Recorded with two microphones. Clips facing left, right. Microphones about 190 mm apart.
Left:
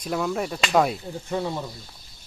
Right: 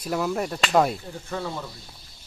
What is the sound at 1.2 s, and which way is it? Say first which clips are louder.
Speech: left 4 dB; 20° left (ahead or behind).